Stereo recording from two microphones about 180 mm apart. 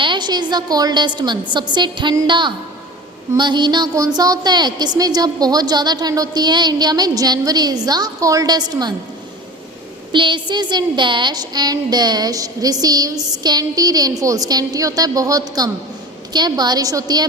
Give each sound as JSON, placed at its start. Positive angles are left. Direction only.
{"t": 0.0, "sound": "a woman's voice", "side_deg": -25}
{"t": 10.1, "sound": "a woman's voice", "side_deg": -25}